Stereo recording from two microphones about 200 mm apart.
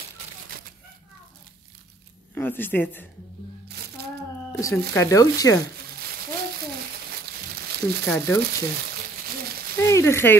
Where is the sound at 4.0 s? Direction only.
55° right (ahead or behind).